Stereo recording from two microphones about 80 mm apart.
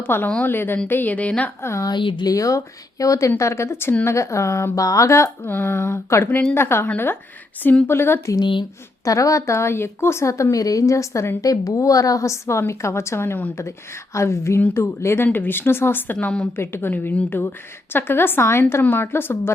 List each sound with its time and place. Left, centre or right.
0.1 s speech: left
1.6 s a woman's voice: left
1.9 s speech: left
2.2 s a woman's voice: left
5.4 s speech: left
7.9 s a woman's voice: left
8.4 s speech: left
9.0 s a woman's voice: left